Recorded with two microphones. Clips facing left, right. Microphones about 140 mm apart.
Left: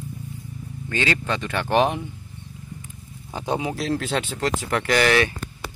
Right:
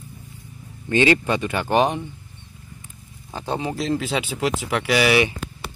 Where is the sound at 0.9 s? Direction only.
20° right (ahead or behind); by 2.1 s centre (ahead or behind).